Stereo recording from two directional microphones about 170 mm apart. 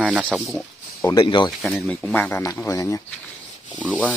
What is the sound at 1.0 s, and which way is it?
Speech, 20° left (ahead or behind).